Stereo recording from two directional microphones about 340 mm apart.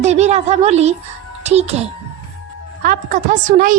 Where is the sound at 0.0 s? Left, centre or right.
Centre.